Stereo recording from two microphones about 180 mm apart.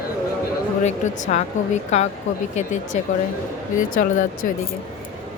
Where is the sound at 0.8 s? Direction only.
40° left (ahead or behind).